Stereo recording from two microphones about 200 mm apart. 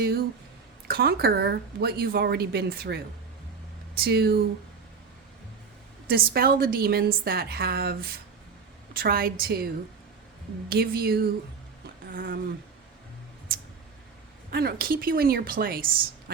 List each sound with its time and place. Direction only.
0.0 s a woman's voice: 50° right (ahead or behind)
6.1 s a woman's voice: 50° right (ahead or behind)
10.7 s a woman's voice: 50° right (ahead or behind)
14.5 s a woman's voice: 50° right (ahead or behind)